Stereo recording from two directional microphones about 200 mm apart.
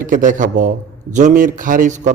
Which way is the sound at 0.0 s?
40° right (ahead or behind).